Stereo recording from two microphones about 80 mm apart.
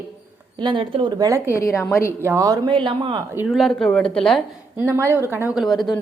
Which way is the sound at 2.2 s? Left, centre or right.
Right.